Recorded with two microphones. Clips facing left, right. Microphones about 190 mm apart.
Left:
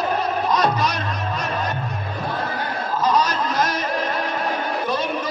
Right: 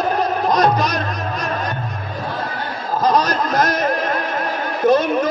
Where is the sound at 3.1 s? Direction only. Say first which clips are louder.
Right 4 dB; 40° right (ahead or behind).